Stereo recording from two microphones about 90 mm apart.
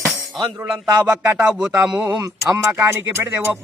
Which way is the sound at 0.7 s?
20° right (ahead or behind).